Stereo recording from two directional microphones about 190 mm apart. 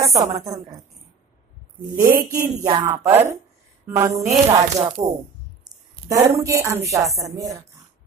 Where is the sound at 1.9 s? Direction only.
50° right (ahead or behind).